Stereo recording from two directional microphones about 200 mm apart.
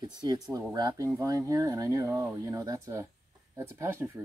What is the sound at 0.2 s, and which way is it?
Speech, 20° right (ahead or behind).